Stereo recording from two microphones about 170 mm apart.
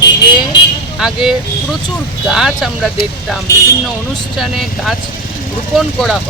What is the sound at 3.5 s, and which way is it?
Speech, 20° left (ahead or behind).